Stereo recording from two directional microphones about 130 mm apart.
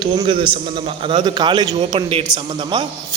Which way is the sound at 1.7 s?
55° right (ahead or behind).